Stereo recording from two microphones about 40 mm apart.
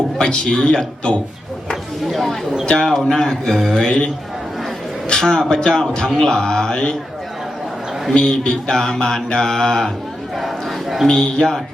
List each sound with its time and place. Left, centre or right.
0.2 s a man's voice: centre
2.0 s speech: centre
2.6 s mantra: centre
3.5 s speech: centre
3.8 s mantra: centre
5.0 s mantra: centre
8.1 s mantra: left
10.3 s a sound: centre
11.1 s mantra: centre